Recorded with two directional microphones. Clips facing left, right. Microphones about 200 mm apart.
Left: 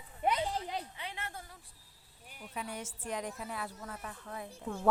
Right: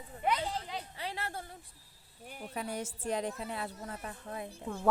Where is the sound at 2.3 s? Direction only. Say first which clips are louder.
Right 4 dB; 45° right (ahead or behind); by 4.5 s 25° right (ahead or behind).